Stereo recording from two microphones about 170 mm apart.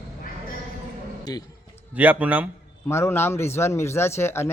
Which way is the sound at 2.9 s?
15° left (ahead or behind).